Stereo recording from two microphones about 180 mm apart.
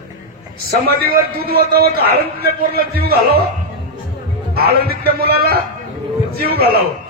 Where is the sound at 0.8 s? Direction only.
55° right (ahead or behind).